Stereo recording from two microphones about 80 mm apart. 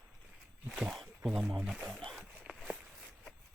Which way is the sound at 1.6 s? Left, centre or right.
Centre.